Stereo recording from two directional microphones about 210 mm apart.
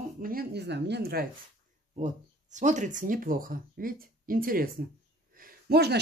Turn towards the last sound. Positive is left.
turn(degrees=-50)  # may be behind; listen again after turning